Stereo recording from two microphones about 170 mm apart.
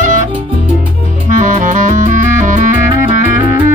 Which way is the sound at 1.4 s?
50° right (ahead or behind).